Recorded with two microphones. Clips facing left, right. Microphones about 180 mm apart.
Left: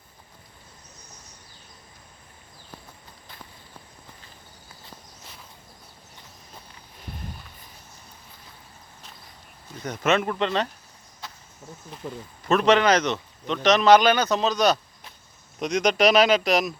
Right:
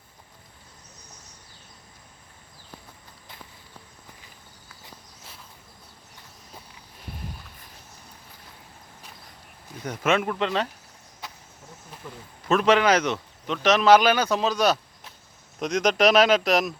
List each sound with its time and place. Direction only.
9.8 s speech: 10° right (ahead or behind)
12.5 s speech: 5° right (ahead or behind)